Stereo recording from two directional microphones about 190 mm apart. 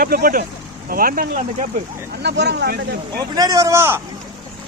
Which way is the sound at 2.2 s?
60° right (ahead or behind).